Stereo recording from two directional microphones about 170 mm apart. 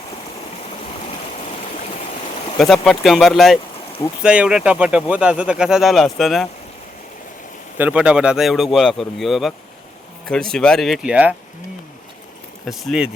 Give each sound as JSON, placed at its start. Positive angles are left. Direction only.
{"t": 2.6, "sound": "speech", "side_deg": 0}
{"t": 7.8, "sound": "speech", "side_deg": -5}
{"t": 12.6, "sound": "speech", "side_deg": 0}